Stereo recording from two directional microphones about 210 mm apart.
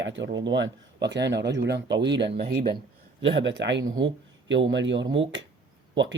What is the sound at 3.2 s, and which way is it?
Speech, 60° right (ahead or behind).